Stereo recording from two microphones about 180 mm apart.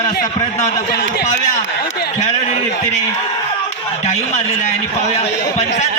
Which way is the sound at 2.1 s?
35° left (ahead or behind).